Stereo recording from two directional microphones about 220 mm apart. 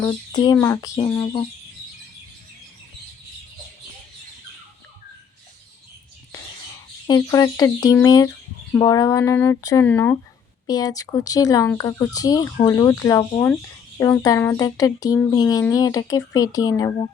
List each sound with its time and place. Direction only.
0.0 s a child's voice: 20° left (ahead or behind)
7.1 s speech: 15° left (ahead or behind)